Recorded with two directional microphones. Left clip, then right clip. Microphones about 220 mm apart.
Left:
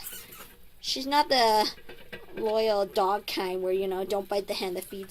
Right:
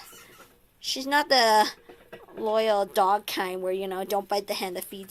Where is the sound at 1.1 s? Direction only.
5° right (ahead or behind).